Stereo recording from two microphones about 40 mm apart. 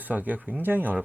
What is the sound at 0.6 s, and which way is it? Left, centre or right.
Speech, right.